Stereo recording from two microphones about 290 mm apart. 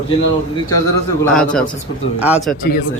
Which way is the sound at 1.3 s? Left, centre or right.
Centre.